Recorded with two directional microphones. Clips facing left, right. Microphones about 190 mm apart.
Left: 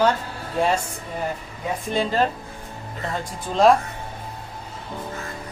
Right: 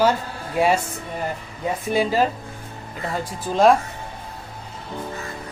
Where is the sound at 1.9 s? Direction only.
10° right (ahead or behind).